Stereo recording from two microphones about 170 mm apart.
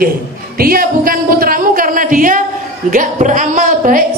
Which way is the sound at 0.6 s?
60° right (ahead or behind).